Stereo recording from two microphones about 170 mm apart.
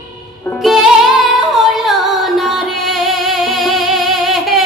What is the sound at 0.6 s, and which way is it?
Music, centre (ahead or behind).